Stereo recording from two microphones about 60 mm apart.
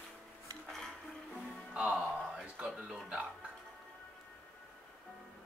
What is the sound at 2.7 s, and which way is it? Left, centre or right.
Music, centre.